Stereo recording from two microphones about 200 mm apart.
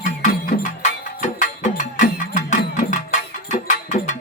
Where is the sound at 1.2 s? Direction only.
40° left (ahead or behind).